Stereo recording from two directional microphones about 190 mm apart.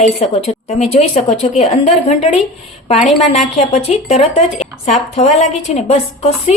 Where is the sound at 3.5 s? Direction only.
35° left (ahead or behind).